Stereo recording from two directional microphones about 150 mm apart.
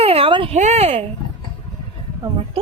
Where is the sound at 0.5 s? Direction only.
50° right (ahead or behind).